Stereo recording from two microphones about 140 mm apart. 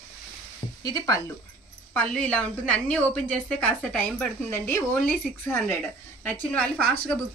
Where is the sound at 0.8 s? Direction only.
25° left (ahead or behind).